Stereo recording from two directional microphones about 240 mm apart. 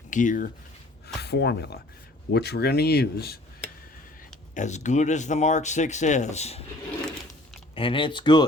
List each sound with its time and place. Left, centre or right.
0.1 s speech: left
4.5 s speech: left
7.8 s speech: left